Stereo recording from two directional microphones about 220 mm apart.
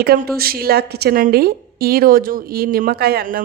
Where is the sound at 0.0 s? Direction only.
45° right (ahead or behind).